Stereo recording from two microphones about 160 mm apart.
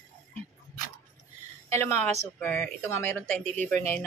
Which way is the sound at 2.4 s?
10° left (ahead or behind).